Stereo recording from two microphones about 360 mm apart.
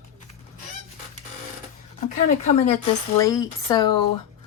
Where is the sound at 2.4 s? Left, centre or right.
Centre.